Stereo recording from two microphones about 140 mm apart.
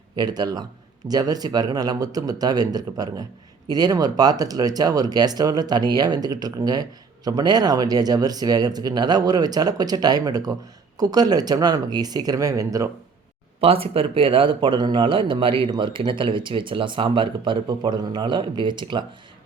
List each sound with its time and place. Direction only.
0.2 s speech: 30° right (ahead or behind)
13.6 s speech: 40° right (ahead or behind)